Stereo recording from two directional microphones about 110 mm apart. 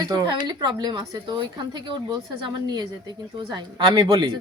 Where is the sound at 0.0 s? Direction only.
40° right (ahead or behind).